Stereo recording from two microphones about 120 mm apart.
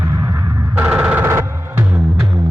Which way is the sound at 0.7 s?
15° right (ahead or behind).